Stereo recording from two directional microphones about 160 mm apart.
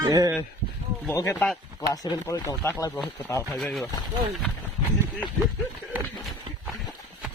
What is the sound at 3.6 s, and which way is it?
Speech, centre (ahead or behind).